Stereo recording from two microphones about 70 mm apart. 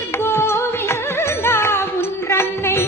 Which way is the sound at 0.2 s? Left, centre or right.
Left.